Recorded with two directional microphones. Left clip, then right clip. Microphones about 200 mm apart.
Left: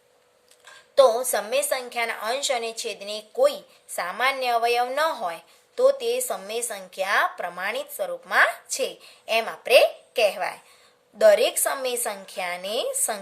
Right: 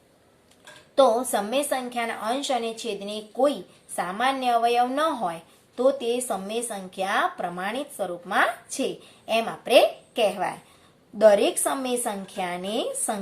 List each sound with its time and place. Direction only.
0.9 s a woman's voice: 40° left (ahead or behind)